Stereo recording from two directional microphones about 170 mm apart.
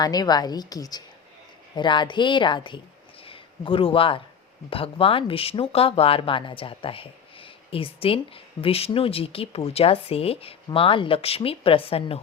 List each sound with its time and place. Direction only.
0.0 s a woman's voice: 25° left (ahead or behind)